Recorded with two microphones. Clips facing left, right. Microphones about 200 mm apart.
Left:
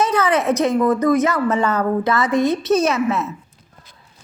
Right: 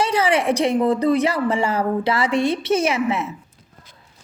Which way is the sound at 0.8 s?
30° right (ahead or behind).